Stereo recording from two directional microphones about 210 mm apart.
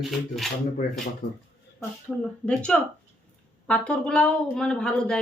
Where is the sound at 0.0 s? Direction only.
Centre (ahead or behind).